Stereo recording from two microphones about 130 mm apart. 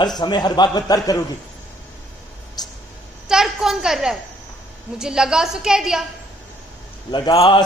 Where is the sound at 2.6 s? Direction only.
30° left (ahead or behind).